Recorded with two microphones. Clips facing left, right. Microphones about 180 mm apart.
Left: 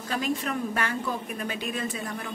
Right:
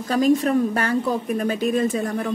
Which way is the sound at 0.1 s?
40° right (ahead or behind).